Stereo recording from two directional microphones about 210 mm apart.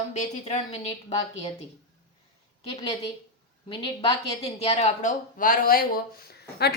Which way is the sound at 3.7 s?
25° left (ahead or behind).